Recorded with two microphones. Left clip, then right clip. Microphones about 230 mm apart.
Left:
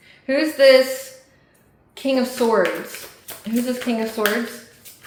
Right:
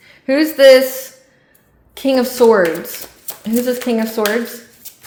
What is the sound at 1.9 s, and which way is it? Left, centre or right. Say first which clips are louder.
A woman's voice: right 7 dB; right.